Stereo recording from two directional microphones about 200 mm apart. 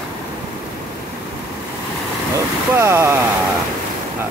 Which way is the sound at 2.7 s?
15° right (ahead or behind).